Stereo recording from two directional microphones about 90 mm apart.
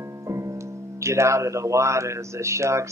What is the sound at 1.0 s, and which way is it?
Speech, 35° right (ahead or behind).